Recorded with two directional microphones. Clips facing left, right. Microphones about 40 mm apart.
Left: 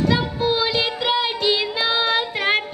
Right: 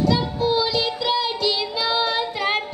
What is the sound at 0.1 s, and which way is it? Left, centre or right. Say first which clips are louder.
Music: even; left.